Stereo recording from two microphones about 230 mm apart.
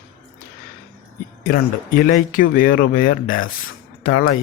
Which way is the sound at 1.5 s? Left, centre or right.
Left.